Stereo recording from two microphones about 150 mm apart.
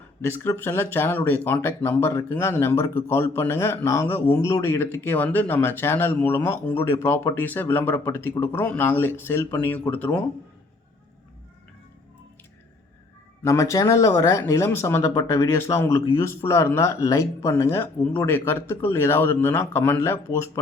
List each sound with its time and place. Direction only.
0.2 s speech: 15° left (ahead or behind)
13.4 s speech: 20° left (ahead or behind)